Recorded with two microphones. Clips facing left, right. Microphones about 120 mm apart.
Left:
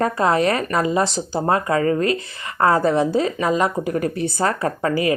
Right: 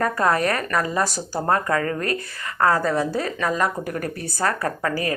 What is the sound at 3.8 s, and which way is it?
Speech, 50° right (ahead or behind).